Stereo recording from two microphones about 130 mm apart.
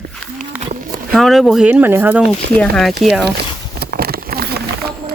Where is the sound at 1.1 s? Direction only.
Centre (ahead or behind).